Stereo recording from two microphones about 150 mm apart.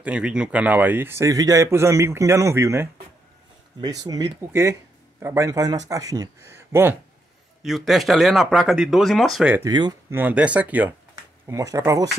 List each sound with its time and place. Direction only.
0.0 s a man's voice: 5° right (ahead or behind)
7.6 s speech: centre (ahead or behind)
9.7 s speech: 30° right (ahead or behind)
10.0 s a man's voice: 15° right (ahead or behind)
11.4 s speech: 20° right (ahead or behind)